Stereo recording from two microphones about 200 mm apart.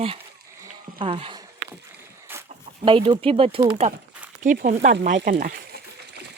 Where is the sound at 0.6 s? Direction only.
25° right (ahead or behind).